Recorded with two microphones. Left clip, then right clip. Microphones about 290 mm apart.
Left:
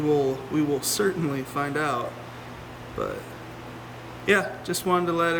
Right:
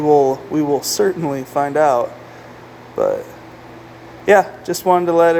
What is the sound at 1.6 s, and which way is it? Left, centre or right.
Speech, centre.